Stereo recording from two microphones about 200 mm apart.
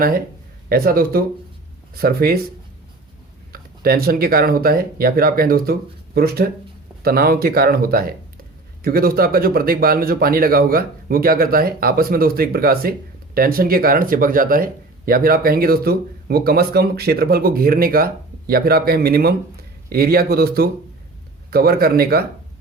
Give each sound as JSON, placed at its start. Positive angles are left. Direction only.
{"t": 0.7, "sound": "speech", "side_deg": -45}
{"t": 3.5, "sound": "speech", "side_deg": -50}